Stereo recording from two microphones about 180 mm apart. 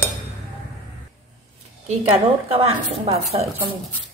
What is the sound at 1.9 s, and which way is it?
A woman's voice, 30° right (ahead or behind).